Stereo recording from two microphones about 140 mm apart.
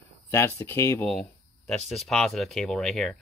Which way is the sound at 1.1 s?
Centre (ahead or behind).